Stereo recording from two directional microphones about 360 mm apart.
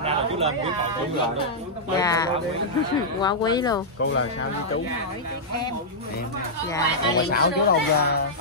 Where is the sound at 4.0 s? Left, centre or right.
Left.